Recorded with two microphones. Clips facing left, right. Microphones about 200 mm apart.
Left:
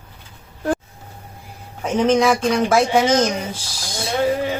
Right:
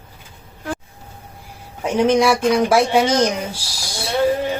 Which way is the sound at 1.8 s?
10° right (ahead or behind).